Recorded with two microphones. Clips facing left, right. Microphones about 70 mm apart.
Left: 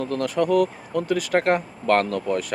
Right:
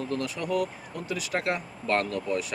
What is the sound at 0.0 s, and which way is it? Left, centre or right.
Speech, left.